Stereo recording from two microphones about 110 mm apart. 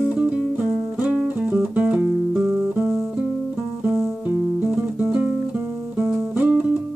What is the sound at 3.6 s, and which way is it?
Music, 20° right (ahead or behind).